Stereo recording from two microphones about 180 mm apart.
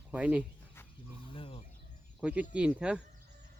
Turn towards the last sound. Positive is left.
turn(degrees=-5)  # may be behind; listen again after turning